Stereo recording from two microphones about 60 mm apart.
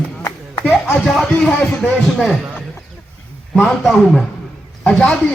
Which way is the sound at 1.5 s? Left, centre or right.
Left.